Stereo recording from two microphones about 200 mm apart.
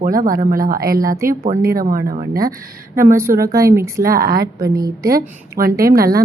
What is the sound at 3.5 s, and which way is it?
Speech, 15° right (ahead or behind).